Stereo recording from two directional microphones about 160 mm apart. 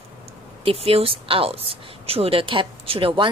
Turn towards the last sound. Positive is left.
turn(degrees=-30)  # may be behind; listen again after turning